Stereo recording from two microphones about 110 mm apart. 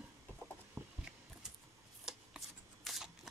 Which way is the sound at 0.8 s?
25° right (ahead or behind).